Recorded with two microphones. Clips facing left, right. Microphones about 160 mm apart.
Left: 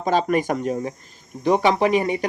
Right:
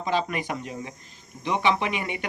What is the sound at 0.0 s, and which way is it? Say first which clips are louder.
Speech: left 7 dB; 45° left (ahead or behind).